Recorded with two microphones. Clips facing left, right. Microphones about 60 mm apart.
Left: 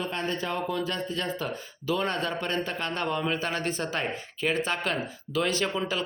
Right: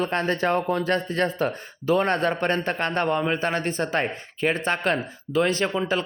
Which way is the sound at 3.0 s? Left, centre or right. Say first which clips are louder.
Right 5 dB; right.